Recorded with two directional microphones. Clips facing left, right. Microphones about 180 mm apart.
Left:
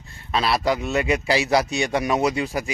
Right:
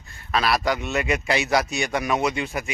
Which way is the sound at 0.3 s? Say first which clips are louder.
Left 1 dB; 25° left (ahead or behind).